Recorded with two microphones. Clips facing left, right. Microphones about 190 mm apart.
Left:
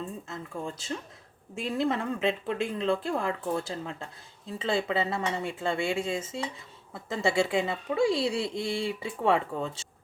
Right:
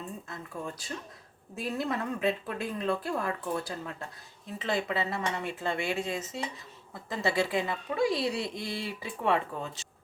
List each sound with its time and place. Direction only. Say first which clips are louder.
0.3 s speech: left 2 dB; 25° left (ahead or behind)